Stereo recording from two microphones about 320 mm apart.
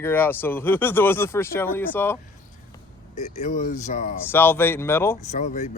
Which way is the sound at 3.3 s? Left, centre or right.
Left.